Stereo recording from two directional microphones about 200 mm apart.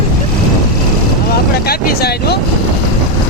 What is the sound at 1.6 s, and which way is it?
Speech, 50° left (ahead or behind).